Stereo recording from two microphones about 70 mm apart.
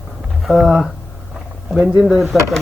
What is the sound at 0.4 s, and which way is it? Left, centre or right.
Speech, centre.